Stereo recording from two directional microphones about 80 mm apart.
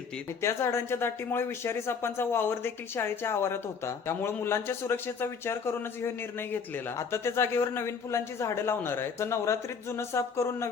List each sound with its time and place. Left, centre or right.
0.4 s speech: left